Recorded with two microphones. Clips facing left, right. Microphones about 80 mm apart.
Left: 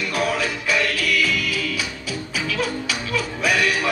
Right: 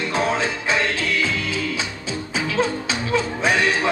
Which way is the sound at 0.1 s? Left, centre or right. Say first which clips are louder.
Right 1 dB; right.